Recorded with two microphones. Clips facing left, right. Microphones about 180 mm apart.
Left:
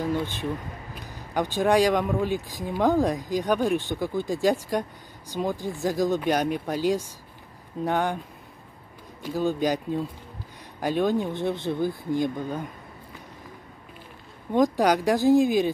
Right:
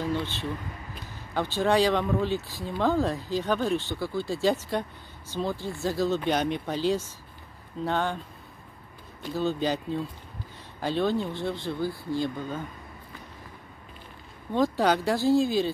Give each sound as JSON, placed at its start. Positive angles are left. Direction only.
{"t": 0.0, "sound": "speech", "side_deg": 15}
{"t": 9.2, "sound": "speech", "side_deg": 10}
{"t": 14.5, "sound": "speech", "side_deg": 15}